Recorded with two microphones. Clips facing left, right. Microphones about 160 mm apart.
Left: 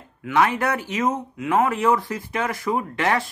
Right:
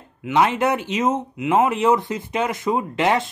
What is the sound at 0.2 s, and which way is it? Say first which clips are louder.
Speech: right 2 dB; 20° right (ahead or behind).